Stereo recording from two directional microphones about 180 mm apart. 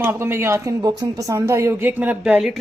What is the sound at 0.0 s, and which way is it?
Speech, 10° right (ahead or behind).